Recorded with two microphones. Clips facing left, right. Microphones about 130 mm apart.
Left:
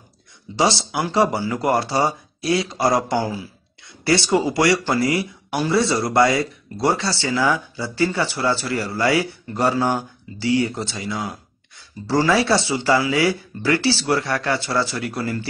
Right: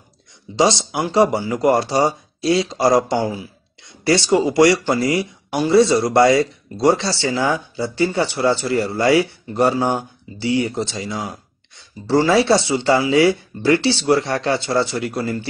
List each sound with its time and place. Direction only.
0.6 s speech: 20° right (ahead or behind)